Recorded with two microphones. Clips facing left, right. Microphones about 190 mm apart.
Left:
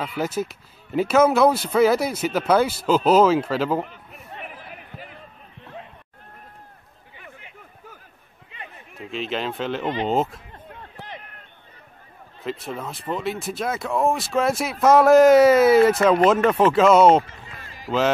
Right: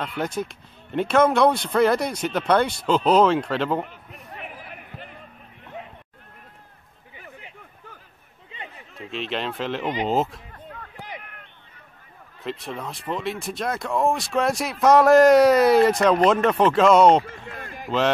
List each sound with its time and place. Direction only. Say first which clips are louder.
0.0 s speech: left 2 dB; 5° left (ahead or behind)
9.1 s speech: left 1 dB; centre (ahead or behind)
12.4 s speech: left 1 dB; centre (ahead or behind)
17.3 s a sound: right 6 dB; 55° right (ahead or behind)
17.8 s speech: left 1 dB; centre (ahead or behind)